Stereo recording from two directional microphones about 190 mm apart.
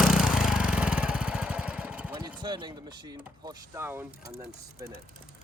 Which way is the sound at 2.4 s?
25° right (ahead or behind).